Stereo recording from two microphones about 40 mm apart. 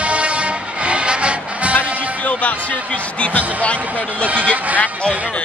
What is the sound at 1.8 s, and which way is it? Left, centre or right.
Music, left.